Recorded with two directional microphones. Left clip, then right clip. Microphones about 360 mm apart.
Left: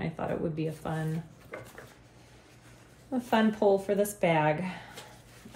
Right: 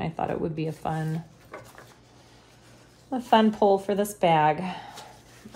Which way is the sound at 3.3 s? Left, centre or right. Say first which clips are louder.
Right 5 dB; right.